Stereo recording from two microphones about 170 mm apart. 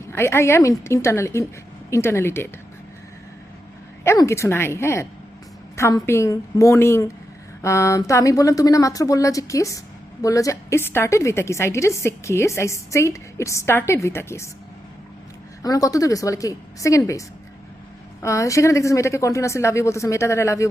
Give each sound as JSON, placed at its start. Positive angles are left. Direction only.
{"t": 0.1, "sound": "speech", "side_deg": 15}
{"t": 4.0, "sound": "speech", "side_deg": 15}
{"t": 15.6, "sound": "speech", "side_deg": 20}
{"t": 18.2, "sound": "speech", "side_deg": 20}